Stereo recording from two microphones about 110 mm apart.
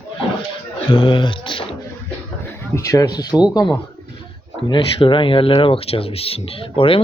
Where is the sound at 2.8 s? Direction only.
30° left (ahead or behind).